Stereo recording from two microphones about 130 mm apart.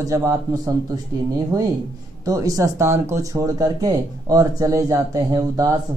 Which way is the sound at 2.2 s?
25° right (ahead or behind).